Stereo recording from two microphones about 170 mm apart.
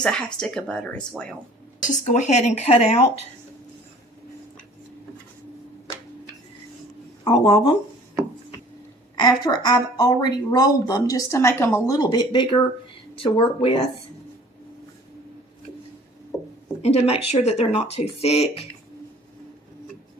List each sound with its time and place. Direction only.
0.0 s speech: 5° left (ahead or behind)
1.9 s speech: 45° left (ahead or behind)
7.3 s a woman's voice: 25° left (ahead or behind)
9.1 s a woman's voice: 25° left (ahead or behind)
16.3 s chopping: 20° left (ahead or behind)
17.1 s speech: 40° left (ahead or behind)